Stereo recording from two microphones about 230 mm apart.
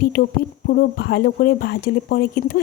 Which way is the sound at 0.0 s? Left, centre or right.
Left.